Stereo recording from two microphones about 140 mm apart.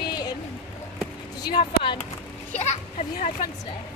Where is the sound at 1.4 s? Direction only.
35° left (ahead or behind).